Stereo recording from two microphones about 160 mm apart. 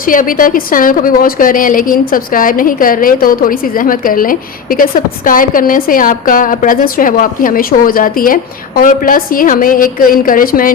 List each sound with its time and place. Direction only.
0.0 s a woman's voice: 60° left (ahead or behind)